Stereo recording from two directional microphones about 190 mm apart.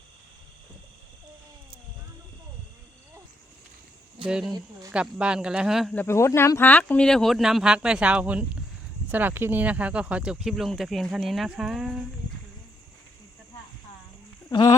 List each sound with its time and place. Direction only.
4.3 s speech: 5° right (ahead or behind)
5.9 s speech: 10° left (ahead or behind)
14.5 s speech: 15° left (ahead or behind)